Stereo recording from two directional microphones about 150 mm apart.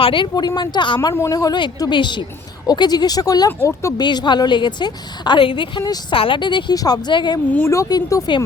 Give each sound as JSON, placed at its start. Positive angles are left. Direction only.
{"t": 0.0, "sound": "a woman's voice", "side_deg": 35}
{"t": 1.1, "sound": "speech", "side_deg": 20}
{"t": 4.0, "sound": "a woman's voice", "side_deg": 30}
{"t": 7.5, "sound": "speech", "side_deg": 15}